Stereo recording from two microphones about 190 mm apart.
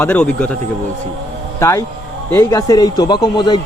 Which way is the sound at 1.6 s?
15° left (ahead or behind).